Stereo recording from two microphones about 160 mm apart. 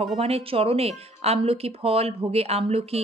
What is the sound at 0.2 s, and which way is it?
Speech, 35° right (ahead or behind).